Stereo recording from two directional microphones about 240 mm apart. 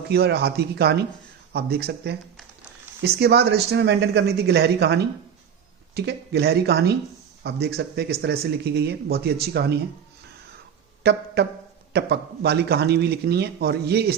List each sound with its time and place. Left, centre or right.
0.1 s speech: right
11.0 s speech: right